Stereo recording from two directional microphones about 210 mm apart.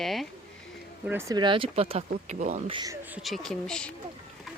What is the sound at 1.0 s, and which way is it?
Speech, 10° right (ahead or behind).